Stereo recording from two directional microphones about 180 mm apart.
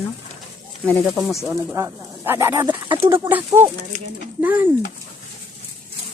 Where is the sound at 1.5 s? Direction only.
15° right (ahead or behind).